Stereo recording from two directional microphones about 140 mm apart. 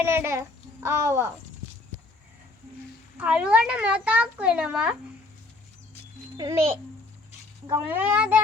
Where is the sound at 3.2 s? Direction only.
10° right (ahead or behind).